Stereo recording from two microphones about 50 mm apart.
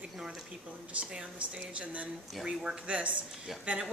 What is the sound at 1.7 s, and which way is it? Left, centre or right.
Speech, right.